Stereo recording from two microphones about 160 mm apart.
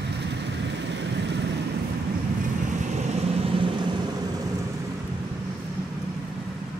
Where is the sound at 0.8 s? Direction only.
90° right.